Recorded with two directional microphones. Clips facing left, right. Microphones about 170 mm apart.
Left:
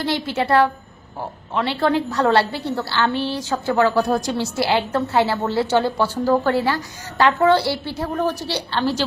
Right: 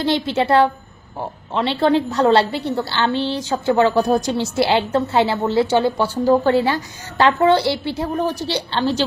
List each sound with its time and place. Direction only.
0.0 s a woman's voice: 25° right (ahead or behind)